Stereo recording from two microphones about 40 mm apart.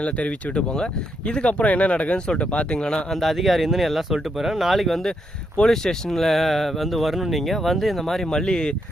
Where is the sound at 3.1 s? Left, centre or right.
Centre.